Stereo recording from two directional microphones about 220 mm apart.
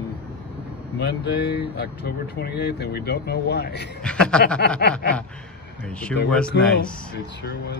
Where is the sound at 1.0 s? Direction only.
50° left (ahead or behind).